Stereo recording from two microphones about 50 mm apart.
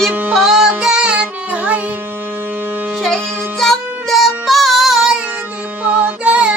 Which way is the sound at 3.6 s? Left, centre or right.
Centre.